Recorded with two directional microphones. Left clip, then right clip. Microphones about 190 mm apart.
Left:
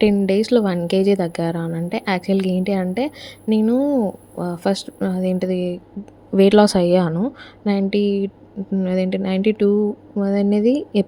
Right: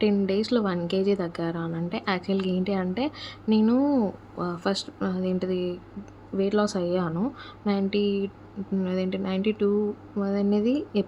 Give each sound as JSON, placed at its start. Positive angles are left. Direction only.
{"t": 0.0, "sound": "a woman's voice", "side_deg": 25}
{"t": 6.3, "sound": "speech", "side_deg": 40}
{"t": 7.1, "sound": "a woman's voice", "side_deg": 25}